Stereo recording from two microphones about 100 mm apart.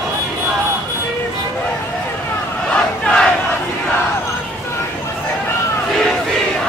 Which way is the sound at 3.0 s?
5° left (ahead or behind).